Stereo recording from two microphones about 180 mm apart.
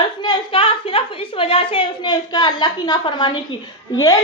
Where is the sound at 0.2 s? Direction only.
25° left (ahead or behind).